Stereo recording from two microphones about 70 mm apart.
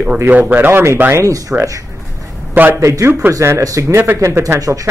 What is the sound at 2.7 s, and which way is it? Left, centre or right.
Speech, right.